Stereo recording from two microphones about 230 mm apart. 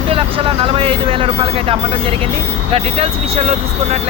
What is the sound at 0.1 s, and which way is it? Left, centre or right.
Speech, right.